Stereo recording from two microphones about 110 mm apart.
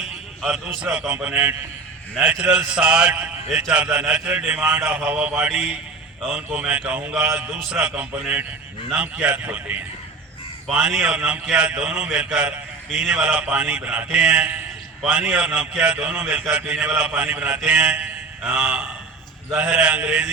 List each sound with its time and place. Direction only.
0.0 s a man's voice: 5° right (ahead or behind)